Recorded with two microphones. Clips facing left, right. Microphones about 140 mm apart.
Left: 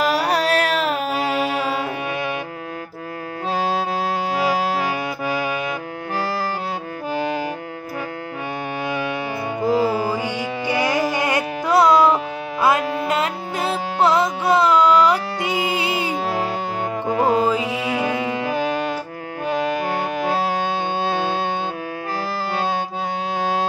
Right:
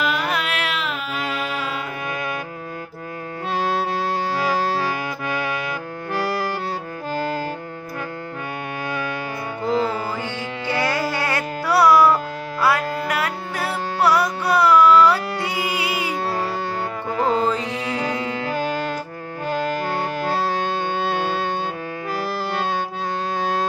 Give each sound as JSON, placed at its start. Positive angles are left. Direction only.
{"t": 0.0, "sound": "music", "side_deg": 35}
{"t": 9.6, "sound": "music", "side_deg": 10}
{"t": 17.1, "sound": "carnatic music", "side_deg": 15}